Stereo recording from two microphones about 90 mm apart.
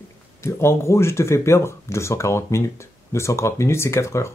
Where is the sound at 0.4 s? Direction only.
30° left (ahead or behind).